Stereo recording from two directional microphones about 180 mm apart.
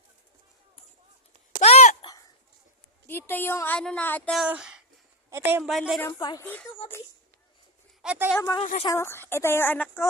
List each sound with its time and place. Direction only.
1.6 s a sound: 40° left (ahead or behind)
3.1 s a woman's voice: 10° left (ahead or behind)
4.4 s a woman's voice: 5° right (ahead or behind)
5.6 s speech: centre (ahead or behind)
6.0 s a woman's voice: 20° left (ahead or behind)
6.4 s a woman's voice: 10° left (ahead or behind)
8.0 s speech: 10° right (ahead or behind)
8.3 s a woman's voice: 15° left (ahead or behind)